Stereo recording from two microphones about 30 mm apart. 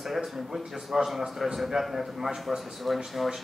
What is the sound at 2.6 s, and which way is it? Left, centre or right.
Speech, centre.